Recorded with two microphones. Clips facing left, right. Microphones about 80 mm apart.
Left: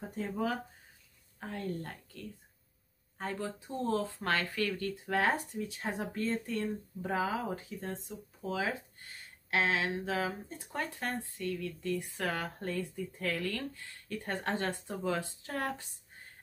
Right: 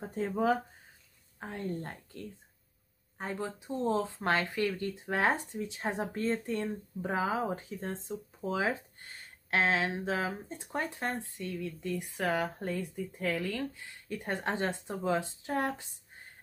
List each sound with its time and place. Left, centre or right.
1.4 s speech: right
3.2 s speech: centre